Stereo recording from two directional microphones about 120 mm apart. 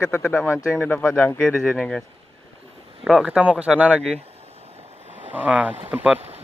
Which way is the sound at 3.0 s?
5° right (ahead or behind).